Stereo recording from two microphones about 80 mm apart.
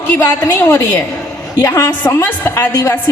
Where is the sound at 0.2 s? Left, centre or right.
Left.